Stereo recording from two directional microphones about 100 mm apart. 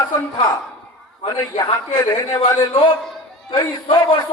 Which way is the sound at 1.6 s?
45° left (ahead or behind).